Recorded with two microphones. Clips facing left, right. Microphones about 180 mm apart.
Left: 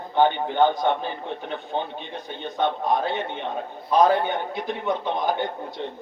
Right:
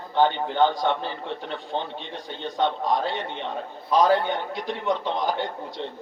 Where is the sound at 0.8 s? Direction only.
55° left (ahead or behind).